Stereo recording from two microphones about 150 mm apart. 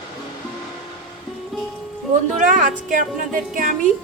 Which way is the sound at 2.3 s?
60° right (ahead or behind).